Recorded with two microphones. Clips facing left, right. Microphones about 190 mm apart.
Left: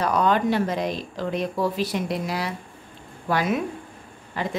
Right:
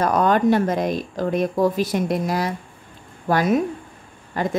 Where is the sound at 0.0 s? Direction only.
45° right (ahead or behind).